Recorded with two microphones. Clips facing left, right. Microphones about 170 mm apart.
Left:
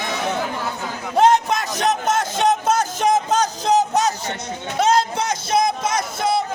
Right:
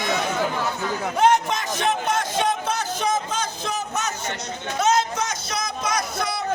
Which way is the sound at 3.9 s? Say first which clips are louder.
Left 7 dB; 35° left (ahead or behind).